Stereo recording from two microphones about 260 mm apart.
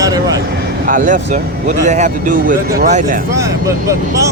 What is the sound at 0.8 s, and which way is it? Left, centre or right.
Speech, right.